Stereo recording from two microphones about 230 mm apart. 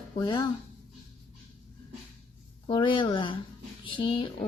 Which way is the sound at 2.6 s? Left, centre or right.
Left.